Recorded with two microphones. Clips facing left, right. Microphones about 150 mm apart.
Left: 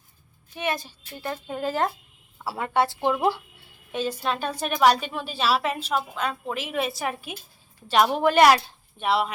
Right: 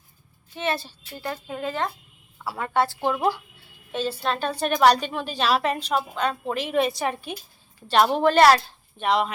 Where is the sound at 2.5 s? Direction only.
20° left (ahead or behind).